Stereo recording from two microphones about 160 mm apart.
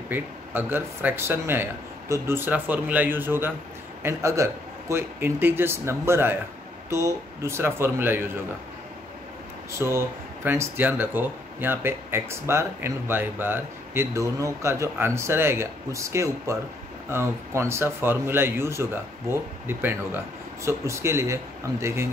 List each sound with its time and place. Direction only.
0.1 s speech: 10° right (ahead or behind)
9.7 s speech: 15° right (ahead or behind)